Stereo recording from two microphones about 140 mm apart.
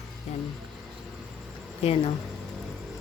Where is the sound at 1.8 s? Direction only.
45° left (ahead or behind).